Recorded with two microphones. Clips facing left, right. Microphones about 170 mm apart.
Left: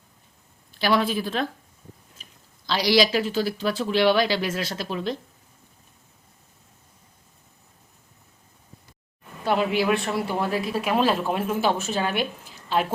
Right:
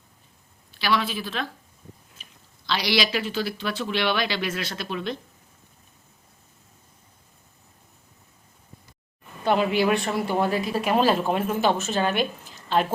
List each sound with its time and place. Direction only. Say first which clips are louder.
0.8 s speech: left 3 dB; 50° left (ahead or behind)
2.6 s speech: left 5 dB; 40° left (ahead or behind)
9.4 s a woman's voice: right 1 dB; centre (ahead or behind)